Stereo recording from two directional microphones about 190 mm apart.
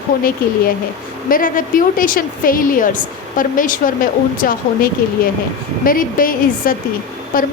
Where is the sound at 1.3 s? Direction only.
45° left (ahead or behind).